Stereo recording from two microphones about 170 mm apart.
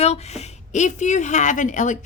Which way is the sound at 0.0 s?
40° left (ahead or behind).